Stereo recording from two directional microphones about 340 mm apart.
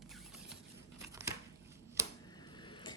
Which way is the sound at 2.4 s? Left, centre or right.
Centre.